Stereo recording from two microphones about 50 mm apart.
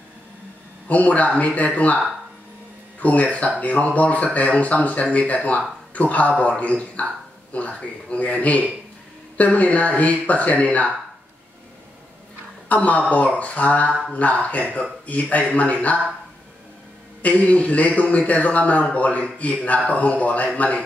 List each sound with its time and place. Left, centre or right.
0.8 s speech: left
3.0 s speech: left
12.6 s speech: left
17.2 s speech: left